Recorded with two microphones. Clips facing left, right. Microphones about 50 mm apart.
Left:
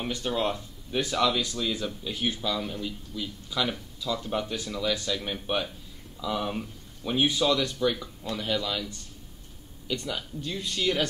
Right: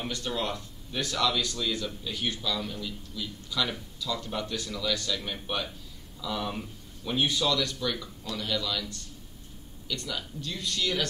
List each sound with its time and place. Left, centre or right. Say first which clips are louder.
0.0 s speech: left 4 dB; centre